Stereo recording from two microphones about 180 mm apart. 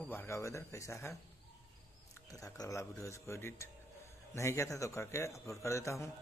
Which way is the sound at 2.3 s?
20° left (ahead or behind).